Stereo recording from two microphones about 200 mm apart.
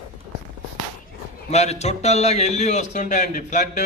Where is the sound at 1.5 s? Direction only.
35° left (ahead or behind).